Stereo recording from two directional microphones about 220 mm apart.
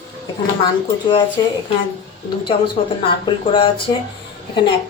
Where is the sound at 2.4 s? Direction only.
20° left (ahead or behind).